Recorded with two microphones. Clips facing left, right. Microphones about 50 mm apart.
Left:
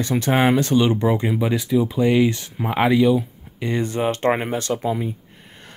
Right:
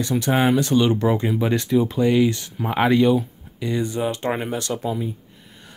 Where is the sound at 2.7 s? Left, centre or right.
Centre.